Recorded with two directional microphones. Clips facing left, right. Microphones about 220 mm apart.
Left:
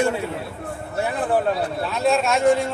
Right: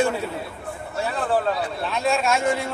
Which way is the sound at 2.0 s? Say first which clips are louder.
Left 4 dB; centre (ahead or behind).